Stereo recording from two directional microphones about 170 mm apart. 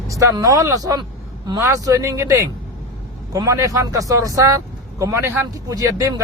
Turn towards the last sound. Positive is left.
turn(degrees=-20)  # may be behind; listen again after turning